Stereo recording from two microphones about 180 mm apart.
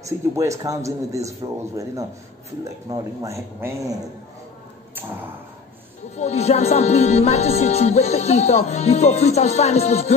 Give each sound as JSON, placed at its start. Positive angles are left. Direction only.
{"t": 0.0, "sound": "a man's voice", "side_deg": -15}
{"t": 6.1, "sound": "music", "side_deg": 35}